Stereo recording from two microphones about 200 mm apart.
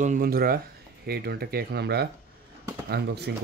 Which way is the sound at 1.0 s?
50° right (ahead or behind).